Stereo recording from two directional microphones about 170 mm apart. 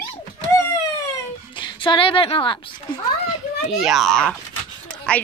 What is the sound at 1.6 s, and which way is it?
A woman's voice, 30° left (ahead or behind).